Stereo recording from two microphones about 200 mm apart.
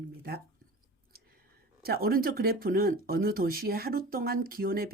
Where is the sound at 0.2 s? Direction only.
50° right (ahead or behind).